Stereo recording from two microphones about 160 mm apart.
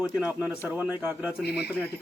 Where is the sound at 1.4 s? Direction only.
90° left.